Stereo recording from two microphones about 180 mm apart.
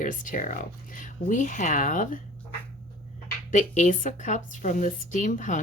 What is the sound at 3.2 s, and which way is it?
Speech, 45° left (ahead or behind).